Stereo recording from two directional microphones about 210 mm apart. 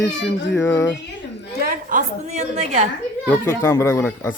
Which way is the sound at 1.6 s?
40° right (ahead or behind).